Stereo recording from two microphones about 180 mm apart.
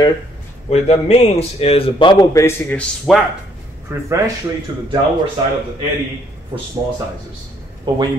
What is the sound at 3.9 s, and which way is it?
Speech, 15° right (ahead or behind).